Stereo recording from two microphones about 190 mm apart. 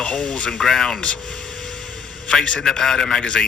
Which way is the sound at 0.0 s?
5° left (ahead or behind).